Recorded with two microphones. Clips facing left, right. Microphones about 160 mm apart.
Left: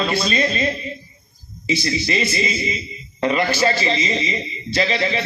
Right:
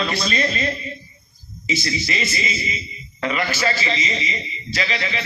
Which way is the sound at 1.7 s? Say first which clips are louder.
Left 4 dB; 30° left (ahead or behind).